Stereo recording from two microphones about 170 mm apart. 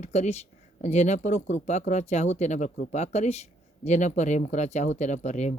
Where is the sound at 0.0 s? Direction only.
40° left (ahead or behind).